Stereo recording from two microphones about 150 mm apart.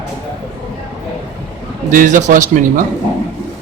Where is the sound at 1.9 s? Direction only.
60° right (ahead or behind).